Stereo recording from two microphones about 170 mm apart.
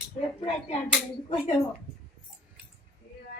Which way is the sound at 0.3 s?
35° left (ahead or behind).